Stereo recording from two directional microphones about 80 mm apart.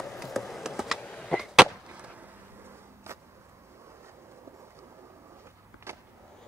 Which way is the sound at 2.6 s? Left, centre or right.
Right.